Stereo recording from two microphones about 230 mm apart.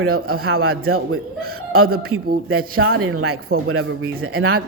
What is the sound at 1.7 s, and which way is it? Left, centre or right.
Speech, right.